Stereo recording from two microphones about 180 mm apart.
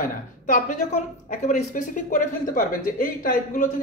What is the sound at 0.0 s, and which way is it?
A woman's voice, 45° left (ahead or behind).